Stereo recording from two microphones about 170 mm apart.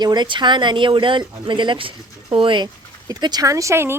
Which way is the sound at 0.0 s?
25° right (ahead or behind).